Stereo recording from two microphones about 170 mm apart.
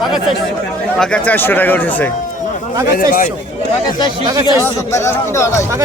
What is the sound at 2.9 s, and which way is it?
Speech, 55° left (ahead or behind).